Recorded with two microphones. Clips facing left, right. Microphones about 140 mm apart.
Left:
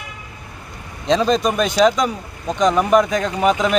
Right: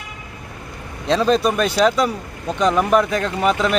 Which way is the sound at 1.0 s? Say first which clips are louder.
Even; 5° right (ahead or behind).